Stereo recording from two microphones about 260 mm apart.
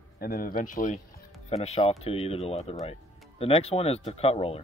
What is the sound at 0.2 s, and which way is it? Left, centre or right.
Speech, left.